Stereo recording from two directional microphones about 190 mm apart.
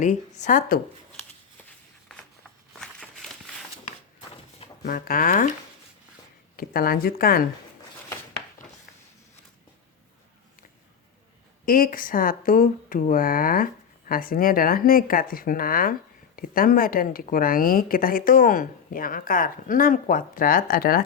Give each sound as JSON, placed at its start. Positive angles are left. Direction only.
{"t": 0.0, "sound": "speech", "side_deg": 40}
{"t": 2.7, "sound": "a sound", "side_deg": 0}
{"t": 4.8, "sound": "speech", "side_deg": 50}
{"t": 6.6, "sound": "speech", "side_deg": 50}
{"t": 11.6, "sound": "speech", "side_deg": 50}